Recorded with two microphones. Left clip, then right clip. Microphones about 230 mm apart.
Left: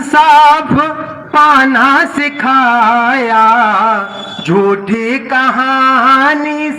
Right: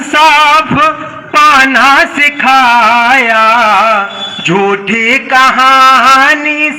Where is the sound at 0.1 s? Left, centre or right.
Left.